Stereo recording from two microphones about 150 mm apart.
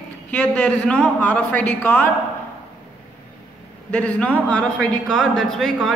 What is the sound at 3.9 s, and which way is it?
Speech, 10° left (ahead or behind).